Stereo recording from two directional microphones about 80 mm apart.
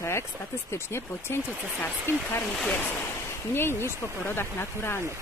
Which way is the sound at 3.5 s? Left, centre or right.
Left.